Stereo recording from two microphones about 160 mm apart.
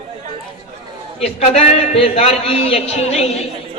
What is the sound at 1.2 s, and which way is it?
A man's voice, 40° left (ahead or behind).